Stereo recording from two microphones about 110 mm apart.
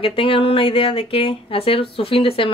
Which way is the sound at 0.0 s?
55° left (ahead or behind).